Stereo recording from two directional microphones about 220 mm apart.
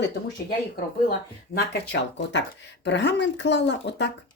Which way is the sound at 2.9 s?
50° left (ahead or behind).